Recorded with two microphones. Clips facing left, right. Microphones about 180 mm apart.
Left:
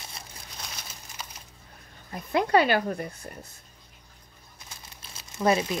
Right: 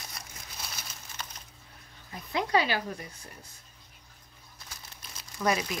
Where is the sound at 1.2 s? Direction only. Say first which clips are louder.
Even; 10° left (ahead or behind).